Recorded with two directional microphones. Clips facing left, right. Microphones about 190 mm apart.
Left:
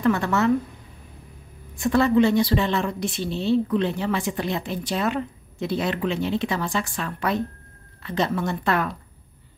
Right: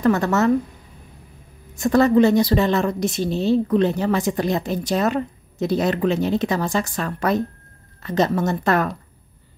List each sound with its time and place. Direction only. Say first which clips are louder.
0.0 s a woman's voice: right 3 dB; 40° right (ahead or behind)
1.8 s a woman's voice: right 3 dB; 40° right (ahead or behind)